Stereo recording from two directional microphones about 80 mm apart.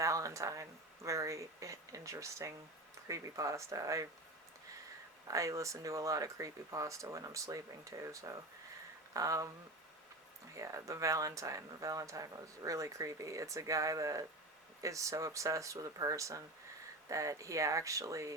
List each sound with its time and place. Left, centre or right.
0.0 s speech: right
5.3 s speech: right
10.5 s speech: right